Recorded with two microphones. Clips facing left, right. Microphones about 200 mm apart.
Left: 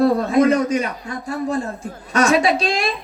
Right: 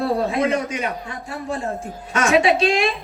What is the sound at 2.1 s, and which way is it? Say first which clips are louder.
Speech: left 1 dB; 40° left (ahead or behind).